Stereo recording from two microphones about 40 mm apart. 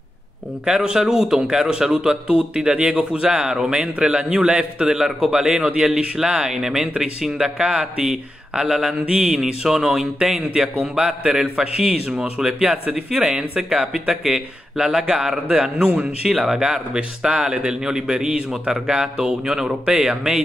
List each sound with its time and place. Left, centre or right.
0.7 s a man's voice: centre
4.9 s a man's voice: centre
14.9 s a man's voice: right